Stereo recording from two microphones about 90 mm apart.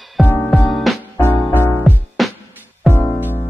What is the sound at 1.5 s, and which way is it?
Music, 25° left (ahead or behind).